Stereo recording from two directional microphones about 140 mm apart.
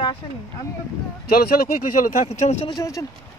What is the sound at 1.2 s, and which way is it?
Speech, 90° left.